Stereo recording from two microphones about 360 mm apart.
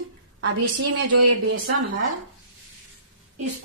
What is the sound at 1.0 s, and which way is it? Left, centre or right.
Speech, right.